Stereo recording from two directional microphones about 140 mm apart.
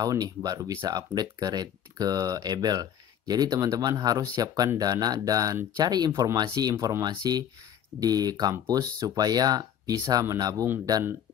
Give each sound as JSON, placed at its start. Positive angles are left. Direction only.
{"t": 0.0, "sound": "speech", "side_deg": -25}